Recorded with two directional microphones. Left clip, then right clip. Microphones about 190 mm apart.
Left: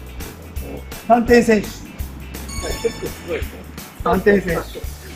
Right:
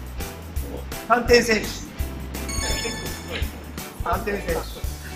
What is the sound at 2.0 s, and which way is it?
Music, centre (ahead or behind).